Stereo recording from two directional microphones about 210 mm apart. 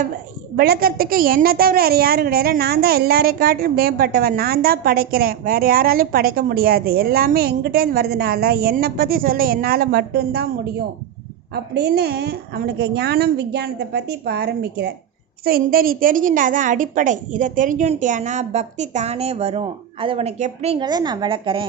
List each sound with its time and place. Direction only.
0.5 s a woman's voice: 45° right (ahead or behind); by 21.6 s 25° right (ahead or behind)